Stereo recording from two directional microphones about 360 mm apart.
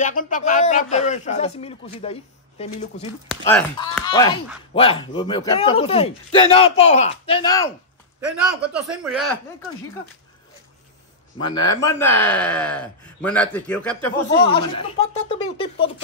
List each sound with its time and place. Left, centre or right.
0.0 s a man's voice: left
3.3 s speech: centre
8.9 s speech: centre
11.3 s speech: centre
14.4 s speech: centre